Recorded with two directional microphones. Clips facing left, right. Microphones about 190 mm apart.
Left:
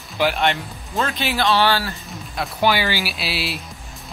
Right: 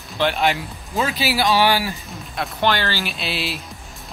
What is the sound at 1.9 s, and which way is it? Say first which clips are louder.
Speech: even; centre (ahead or behind).